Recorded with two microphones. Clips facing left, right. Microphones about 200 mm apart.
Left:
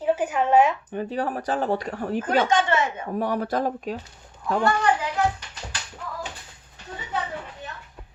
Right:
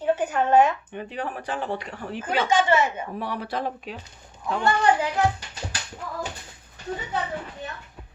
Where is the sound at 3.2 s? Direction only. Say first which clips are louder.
Left 6 dB; 45° left (ahead or behind).